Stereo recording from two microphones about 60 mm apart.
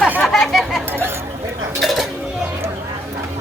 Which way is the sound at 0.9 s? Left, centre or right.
Right.